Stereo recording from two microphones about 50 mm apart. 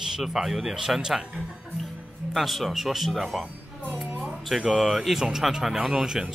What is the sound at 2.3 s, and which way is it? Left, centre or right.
Speech, centre.